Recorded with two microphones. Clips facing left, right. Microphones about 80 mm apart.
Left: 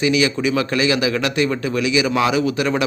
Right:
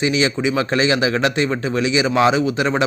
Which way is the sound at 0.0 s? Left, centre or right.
Right.